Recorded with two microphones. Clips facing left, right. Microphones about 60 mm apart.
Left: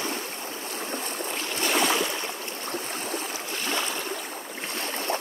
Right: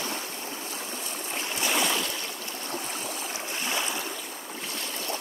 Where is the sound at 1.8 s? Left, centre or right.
Centre.